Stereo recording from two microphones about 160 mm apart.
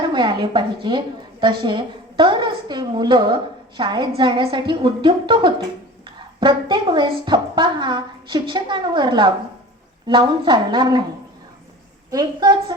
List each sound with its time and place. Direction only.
0.1 s a woman's voice: 30° right (ahead or behind)
12.1 s a woman's voice: 25° right (ahead or behind)